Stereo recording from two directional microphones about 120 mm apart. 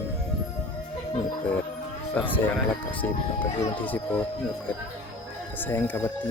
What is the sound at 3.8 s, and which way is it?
Speech, 15° left (ahead or behind).